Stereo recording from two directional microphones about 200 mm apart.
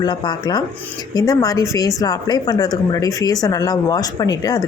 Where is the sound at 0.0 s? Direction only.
20° left (ahead or behind).